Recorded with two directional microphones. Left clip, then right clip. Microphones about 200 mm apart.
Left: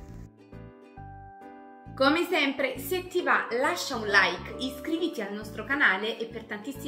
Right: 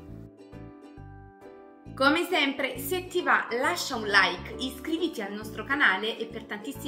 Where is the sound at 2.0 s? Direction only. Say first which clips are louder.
Even; 5° right (ahead or behind).